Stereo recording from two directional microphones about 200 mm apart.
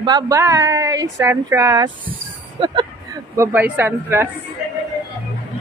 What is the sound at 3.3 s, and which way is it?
Speech, 10° right (ahead or behind).